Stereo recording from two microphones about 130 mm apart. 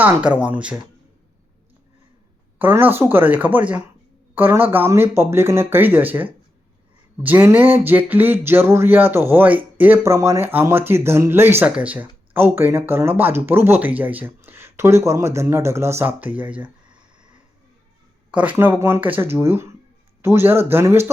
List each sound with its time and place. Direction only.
0.0 s speech: 10° right (ahead or behind)
2.6 s speech: 15° right (ahead or behind)
18.3 s speech: 10° right (ahead or behind)